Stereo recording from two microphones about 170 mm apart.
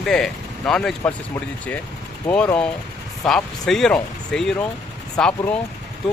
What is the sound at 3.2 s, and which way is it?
Speech, centre (ahead or behind).